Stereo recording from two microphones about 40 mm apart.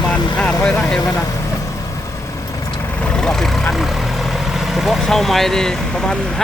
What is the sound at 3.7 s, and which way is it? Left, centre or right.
Vehicle, centre.